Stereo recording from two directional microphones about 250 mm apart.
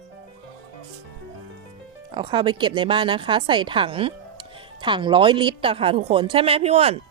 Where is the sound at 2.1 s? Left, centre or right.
Centre.